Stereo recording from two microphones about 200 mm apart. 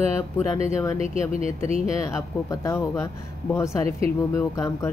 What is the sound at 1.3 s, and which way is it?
Speech, 30° right (ahead or behind).